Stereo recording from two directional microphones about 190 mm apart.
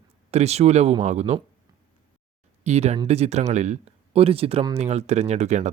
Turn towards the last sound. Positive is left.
turn(degrees=-35)  # may be behind; listen again after turning